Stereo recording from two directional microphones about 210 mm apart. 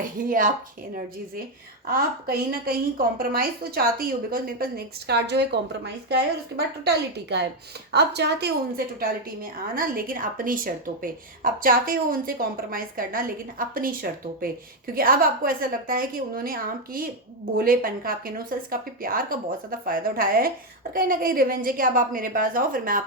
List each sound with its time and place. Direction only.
0.0 s speech: 40° right (ahead or behind)
1.9 s a woman's voice: 45° right (ahead or behind)